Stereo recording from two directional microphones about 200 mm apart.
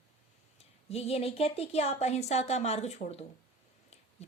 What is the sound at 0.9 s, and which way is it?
Speech, 30° left (ahead or behind).